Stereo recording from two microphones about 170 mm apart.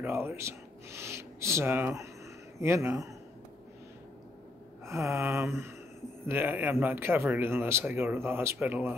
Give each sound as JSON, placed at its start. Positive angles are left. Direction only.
{"t": 0.0, "sound": "speech", "side_deg": -15}
{"t": 4.8, "sound": "speech", "side_deg": -15}